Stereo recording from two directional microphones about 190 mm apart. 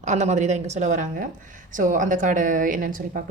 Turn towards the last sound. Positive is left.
turn(degrees=-45)  # may be behind; listen again after turning